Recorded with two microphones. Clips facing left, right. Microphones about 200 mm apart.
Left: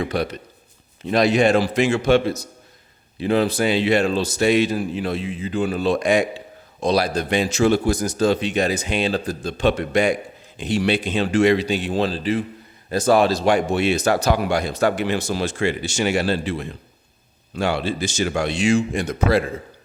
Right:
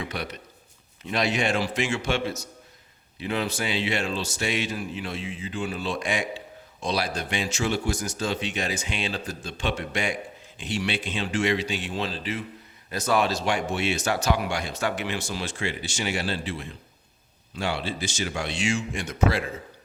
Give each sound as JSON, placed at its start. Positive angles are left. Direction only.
{"t": 0.1, "sound": "a man's voice", "side_deg": 35}